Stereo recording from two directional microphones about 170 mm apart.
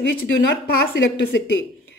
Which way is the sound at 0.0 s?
90° left.